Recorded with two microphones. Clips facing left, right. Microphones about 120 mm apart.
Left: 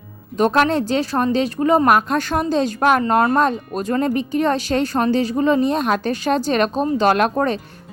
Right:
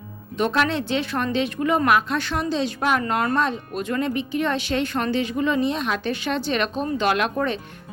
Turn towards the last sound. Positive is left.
turn(degrees=40)  # may be behind; listen again after turning